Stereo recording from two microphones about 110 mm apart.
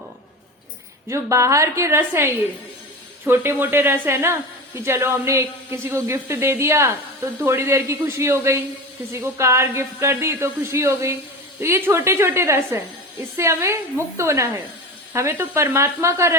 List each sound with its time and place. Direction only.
1.0 s a woman's voice: 25° right (ahead or behind)